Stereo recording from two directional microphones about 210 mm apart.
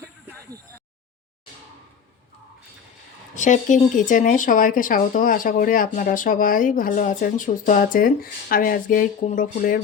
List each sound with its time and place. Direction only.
3.3 s speech: 35° left (ahead or behind)